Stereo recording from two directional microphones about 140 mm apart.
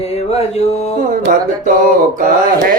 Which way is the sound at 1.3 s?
90° right.